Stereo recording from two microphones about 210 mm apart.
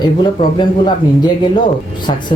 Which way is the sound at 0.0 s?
20° left (ahead or behind).